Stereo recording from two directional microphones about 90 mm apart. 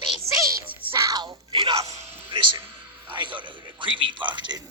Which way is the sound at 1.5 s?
55° right (ahead or behind).